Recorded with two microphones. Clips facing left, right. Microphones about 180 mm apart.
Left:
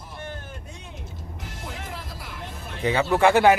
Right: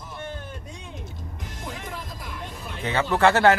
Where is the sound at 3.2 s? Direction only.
15° left (ahead or behind).